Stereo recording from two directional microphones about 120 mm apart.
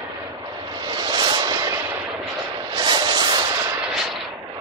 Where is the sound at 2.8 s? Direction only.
40° right (ahead or behind).